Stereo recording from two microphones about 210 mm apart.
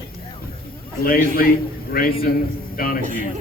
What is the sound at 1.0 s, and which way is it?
A man's voice, 45° left (ahead or behind).